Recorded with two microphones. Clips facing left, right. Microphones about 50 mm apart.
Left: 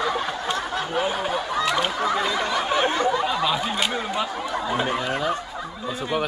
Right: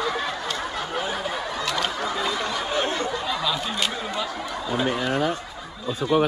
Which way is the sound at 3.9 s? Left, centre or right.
Left.